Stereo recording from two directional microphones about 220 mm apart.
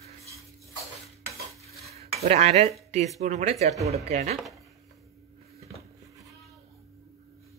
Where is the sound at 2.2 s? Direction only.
30° right (ahead or behind).